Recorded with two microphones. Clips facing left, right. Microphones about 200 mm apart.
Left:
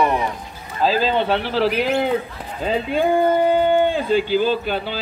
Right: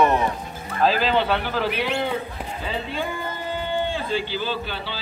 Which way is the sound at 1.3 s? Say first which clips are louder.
Left 3 dB; 30° left (ahead or behind).